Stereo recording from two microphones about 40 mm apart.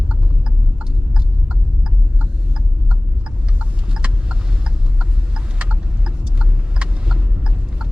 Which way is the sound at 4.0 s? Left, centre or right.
Right.